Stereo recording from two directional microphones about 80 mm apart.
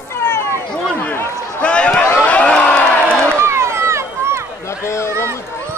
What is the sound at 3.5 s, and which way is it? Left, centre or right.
Run, right.